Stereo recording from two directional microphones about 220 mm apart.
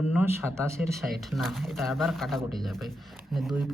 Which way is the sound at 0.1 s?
10° right (ahead or behind).